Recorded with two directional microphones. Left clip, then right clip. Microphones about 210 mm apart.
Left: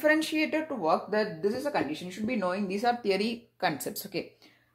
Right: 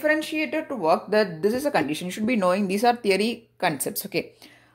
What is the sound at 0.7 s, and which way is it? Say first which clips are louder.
Speech: right 5 dB; 30° right (ahead or behind).